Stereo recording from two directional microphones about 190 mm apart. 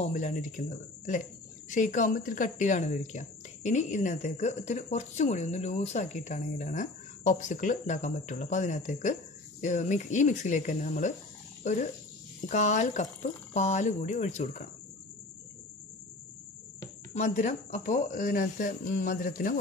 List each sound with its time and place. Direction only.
0.0 s speech: 40° left (ahead or behind)
17.1 s speech: 40° left (ahead or behind)